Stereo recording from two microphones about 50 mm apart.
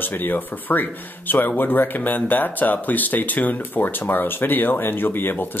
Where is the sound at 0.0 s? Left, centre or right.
Left.